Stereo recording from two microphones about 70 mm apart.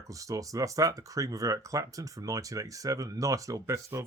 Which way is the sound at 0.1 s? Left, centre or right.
Right.